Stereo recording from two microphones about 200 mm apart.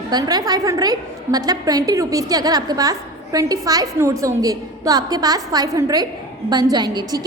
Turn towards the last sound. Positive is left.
turn(degrees=-20)  # may be behind; listen again after turning